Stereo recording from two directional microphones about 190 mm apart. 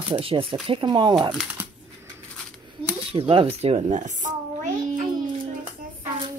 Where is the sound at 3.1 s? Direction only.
30° right (ahead or behind).